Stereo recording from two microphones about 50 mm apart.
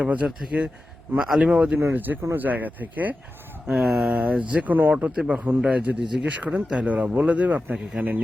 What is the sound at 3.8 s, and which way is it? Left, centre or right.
Speech, centre.